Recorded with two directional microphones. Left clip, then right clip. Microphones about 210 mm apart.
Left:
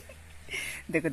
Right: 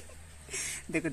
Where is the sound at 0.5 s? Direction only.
25° left (ahead or behind).